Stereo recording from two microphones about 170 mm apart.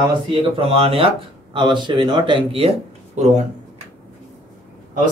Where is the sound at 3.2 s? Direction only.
45° right (ahead or behind).